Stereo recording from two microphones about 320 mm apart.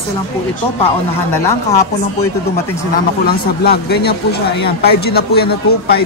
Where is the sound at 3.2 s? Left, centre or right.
Left.